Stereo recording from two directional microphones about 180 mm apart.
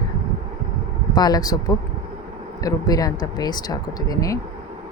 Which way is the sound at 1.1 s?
20° left (ahead or behind).